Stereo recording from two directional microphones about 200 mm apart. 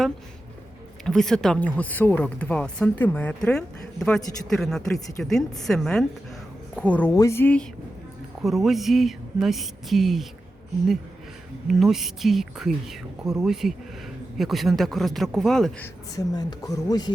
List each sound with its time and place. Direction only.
1.0 s speech: centre (ahead or behind)
11.7 s speech: centre (ahead or behind)
16.1 s speech: 20° left (ahead or behind)